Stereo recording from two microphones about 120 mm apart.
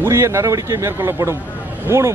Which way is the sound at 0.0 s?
20° right (ahead or behind).